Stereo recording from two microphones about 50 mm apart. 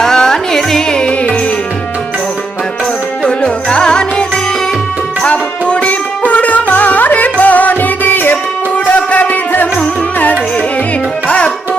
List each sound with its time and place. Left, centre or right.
0.0 s music: centre
3.2 s music: centre; by 9.6 s left
11.3 s music: left